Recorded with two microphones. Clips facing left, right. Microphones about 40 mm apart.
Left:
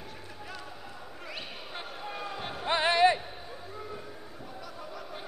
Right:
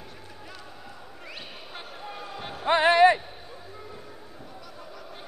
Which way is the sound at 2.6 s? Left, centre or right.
Right.